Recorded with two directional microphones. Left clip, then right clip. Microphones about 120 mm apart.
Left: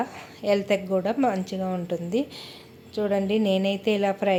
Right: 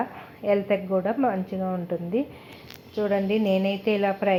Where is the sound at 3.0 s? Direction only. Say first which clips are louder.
Even; 5° left (ahead or behind).